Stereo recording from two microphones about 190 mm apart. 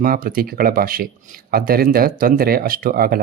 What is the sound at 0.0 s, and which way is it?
Speech, 50° right (ahead or behind).